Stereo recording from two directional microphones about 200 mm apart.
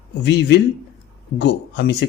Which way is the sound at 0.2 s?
55° left (ahead or behind).